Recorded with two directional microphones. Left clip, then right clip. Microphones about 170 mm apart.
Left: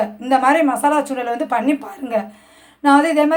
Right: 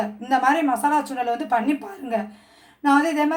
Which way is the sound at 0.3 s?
15° left (ahead or behind).